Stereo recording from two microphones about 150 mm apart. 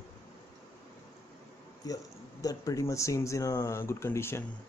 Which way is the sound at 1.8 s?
25° left (ahead or behind).